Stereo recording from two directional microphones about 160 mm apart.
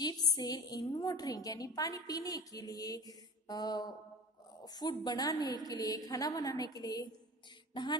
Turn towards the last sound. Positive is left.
turn(degrees=25)  # may be behind; listen again after turning